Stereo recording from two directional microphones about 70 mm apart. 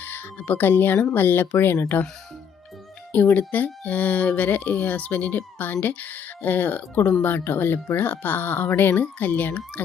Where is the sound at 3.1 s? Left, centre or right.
Left.